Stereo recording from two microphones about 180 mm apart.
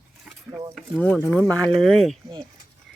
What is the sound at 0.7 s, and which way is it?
Speech, 10° left (ahead or behind).